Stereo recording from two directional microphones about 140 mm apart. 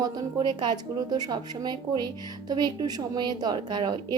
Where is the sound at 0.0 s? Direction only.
30° right (ahead or behind).